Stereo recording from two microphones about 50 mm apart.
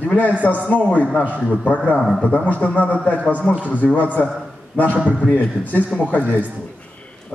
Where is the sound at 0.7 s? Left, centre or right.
Left.